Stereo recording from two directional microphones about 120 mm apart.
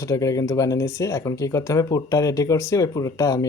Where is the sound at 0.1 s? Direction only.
30° left (ahead or behind).